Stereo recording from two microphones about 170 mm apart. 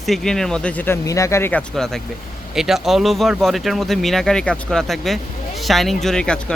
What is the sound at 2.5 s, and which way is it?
Speech, centre (ahead or behind).